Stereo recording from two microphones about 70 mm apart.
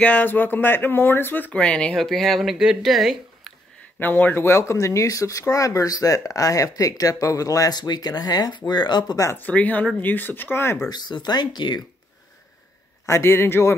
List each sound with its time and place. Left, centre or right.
0.0 s speech: left
1.6 s speech: centre
2.0 s speech: centre
4.0 s speech: left
9.4 s speech: left
10.9 s speech: left
13.0 s a man's voice: left